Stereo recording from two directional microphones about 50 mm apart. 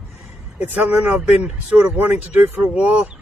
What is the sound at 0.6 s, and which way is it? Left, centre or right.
Speech, right.